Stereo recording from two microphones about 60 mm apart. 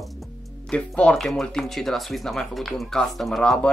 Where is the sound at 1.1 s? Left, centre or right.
Centre.